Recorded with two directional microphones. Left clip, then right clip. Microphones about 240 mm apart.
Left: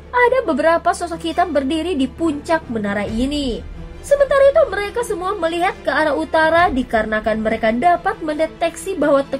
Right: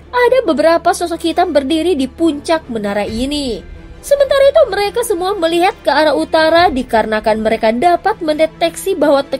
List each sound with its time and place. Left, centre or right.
0.1 s a woman's voice: right